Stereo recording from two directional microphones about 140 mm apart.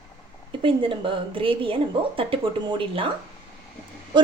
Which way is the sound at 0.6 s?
35° right (ahead or behind).